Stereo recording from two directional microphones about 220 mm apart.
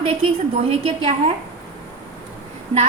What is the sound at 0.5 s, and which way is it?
Speech, 30° right (ahead or behind).